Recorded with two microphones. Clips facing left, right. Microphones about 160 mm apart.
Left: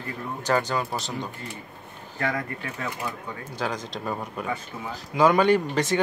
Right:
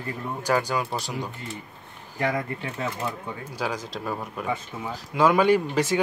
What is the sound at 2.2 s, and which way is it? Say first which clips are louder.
Speech: right 2 dB; 25° right (ahead or behind).